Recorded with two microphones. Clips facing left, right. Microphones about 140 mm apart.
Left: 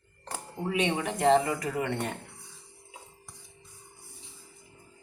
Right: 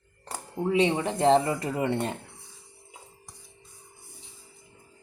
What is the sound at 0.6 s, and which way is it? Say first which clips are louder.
Speech: right 5 dB; centre (ahead or behind).